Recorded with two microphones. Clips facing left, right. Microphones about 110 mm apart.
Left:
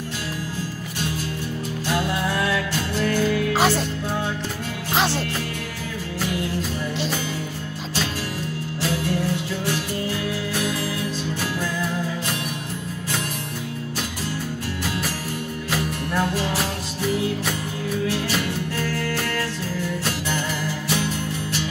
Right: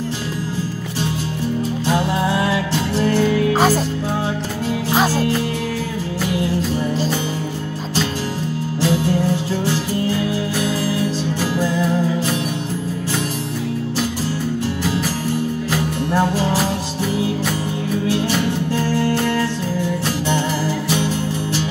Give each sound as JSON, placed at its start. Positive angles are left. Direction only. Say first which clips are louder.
{"t": 1.9, "sound": "music", "louder": "right 4 dB", "side_deg": -25}
{"t": 8.8, "sound": "music", "louder": "right 6 dB", "side_deg": -30}
{"t": 11.6, "sound": "music", "louder": "right 10 dB", "side_deg": -30}
{"t": 16.1, "sound": "music", "louder": "right 6 dB", "side_deg": -30}
{"t": 18.4, "sound": "music", "louder": "right 6 dB", "side_deg": -30}